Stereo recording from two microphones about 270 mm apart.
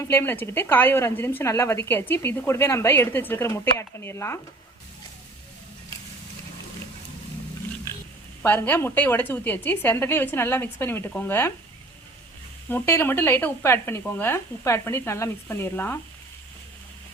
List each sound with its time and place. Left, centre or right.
0.0 s speech: centre
8.4 s speech: centre
12.6 s speech: centre